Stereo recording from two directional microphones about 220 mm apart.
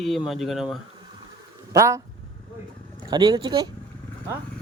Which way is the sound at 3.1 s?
20° right (ahead or behind).